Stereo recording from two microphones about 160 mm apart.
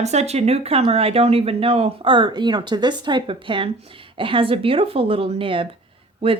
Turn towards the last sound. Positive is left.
turn(degrees=-35)  # may be behind; listen again after turning